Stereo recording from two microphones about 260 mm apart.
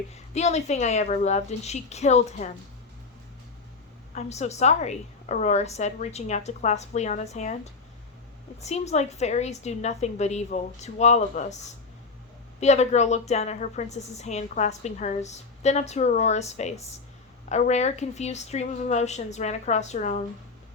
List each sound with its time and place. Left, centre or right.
0.3 s a woman's voice: left
4.1 s a woman's voice: left